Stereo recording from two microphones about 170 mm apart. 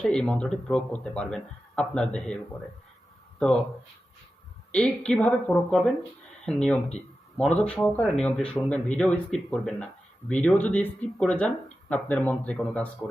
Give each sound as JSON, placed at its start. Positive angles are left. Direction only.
{"t": 0.0, "sound": "speech", "side_deg": 5}
{"t": 4.7, "sound": "speech", "side_deg": 5}